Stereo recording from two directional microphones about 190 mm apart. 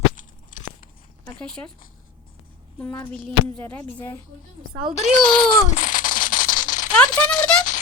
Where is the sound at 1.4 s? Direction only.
5° left (ahead or behind).